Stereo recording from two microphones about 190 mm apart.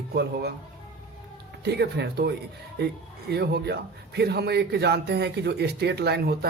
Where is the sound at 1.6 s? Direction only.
60° right (ahead or behind).